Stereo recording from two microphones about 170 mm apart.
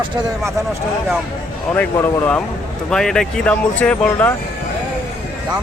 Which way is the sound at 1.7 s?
10° left (ahead or behind).